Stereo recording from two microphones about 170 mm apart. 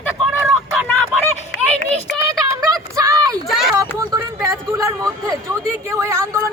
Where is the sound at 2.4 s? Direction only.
20° right (ahead or behind).